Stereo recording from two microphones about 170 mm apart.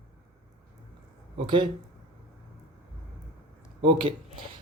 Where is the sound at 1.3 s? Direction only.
30° right (ahead or behind).